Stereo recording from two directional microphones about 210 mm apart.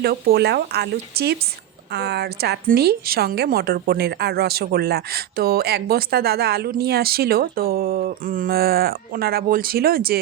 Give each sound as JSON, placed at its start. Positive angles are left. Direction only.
{"t": 0.0, "sound": "a woman's voice", "side_deg": -50}